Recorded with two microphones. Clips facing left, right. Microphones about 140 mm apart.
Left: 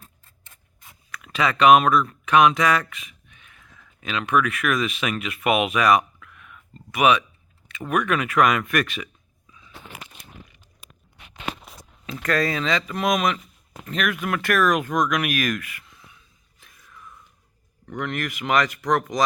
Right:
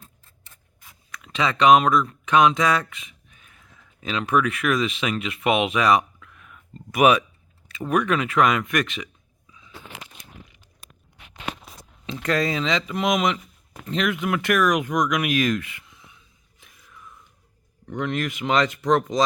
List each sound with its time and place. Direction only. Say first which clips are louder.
1.1 s speech: left 1 dB; 20° right (ahead or behind)
3.3 s speech: left 1 dB; 35° right (ahead or behind)
7.7 s speech: right 1 dB; 30° right (ahead or behind)
12.0 s speech: even; 25° right (ahead or behind)
16.6 s whispering: left 1 dB; 15° right (ahead or behind)
17.8 s speech: right 2 dB; 20° right (ahead or behind)